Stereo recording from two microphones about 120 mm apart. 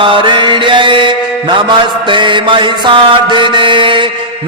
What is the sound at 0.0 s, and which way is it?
Mantra, 45° right (ahead or behind).